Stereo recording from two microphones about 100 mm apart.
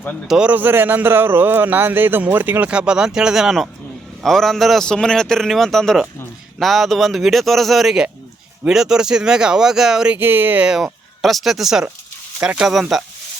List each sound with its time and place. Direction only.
0.3 s a man's voice: 10° right (ahead or behind)
10.2 s speech: 20° right (ahead or behind)
10.7 s a man's voice: centre (ahead or behind)